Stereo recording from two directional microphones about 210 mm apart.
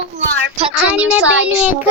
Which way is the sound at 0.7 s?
5° right (ahead or behind).